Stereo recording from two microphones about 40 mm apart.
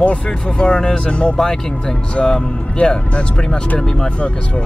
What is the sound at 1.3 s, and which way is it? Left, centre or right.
Speech, centre.